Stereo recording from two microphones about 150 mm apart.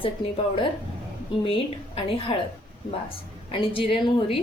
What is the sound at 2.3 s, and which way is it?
Speech, 40° left (ahead or behind).